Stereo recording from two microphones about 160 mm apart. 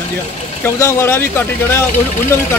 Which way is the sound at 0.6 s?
15° left (ahead or behind).